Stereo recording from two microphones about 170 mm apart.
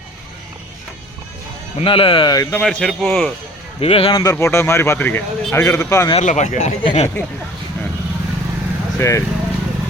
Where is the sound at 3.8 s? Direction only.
35° left (ahead or behind).